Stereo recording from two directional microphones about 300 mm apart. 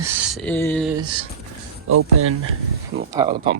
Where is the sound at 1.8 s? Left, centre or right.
Right.